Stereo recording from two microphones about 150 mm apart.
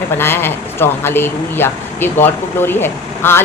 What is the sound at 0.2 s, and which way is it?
Speech, 15° left (ahead or behind).